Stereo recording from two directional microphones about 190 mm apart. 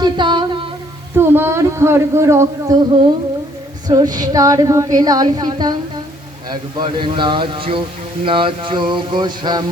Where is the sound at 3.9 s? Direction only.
20° right (ahead or behind).